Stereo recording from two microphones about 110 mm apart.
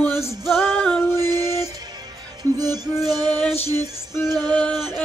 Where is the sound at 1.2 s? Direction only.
35° right (ahead or behind).